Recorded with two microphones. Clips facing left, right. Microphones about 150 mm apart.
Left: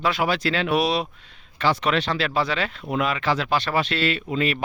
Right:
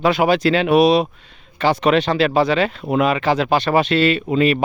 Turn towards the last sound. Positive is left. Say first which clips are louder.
# right 8 dB
turn(degrees=-15)  # may be behind; listen again after turning